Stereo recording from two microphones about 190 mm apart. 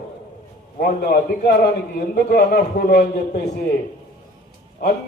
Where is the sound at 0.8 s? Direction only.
50° left (ahead or behind).